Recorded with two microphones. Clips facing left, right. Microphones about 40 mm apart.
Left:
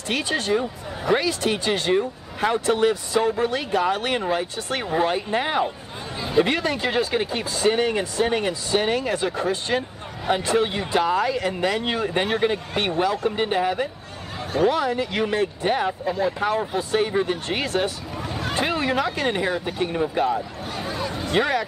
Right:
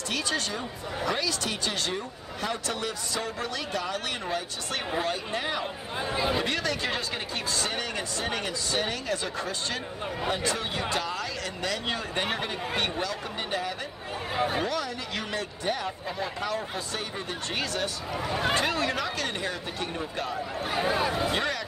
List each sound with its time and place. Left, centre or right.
0.1 s speech: left
6.8 s speech: centre
7.7 s speech: left
14.3 s a sound: centre
14.7 s speech: left
16.1 s speech: centre
16.3 s speech: left
20.7 s speech: centre
21.4 s speech: centre